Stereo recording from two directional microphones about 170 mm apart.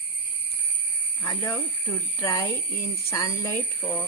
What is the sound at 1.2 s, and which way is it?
Speech, 20° left (ahead or behind).